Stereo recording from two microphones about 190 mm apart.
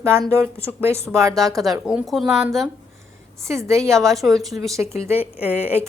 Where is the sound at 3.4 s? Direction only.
15° right (ahead or behind).